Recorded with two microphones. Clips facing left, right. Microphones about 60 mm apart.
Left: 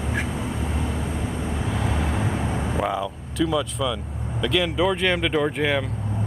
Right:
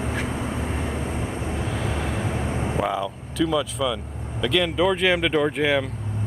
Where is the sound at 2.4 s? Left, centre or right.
Right.